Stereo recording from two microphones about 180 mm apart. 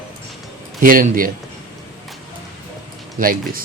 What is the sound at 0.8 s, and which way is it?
Speech, 50° right (ahead or behind).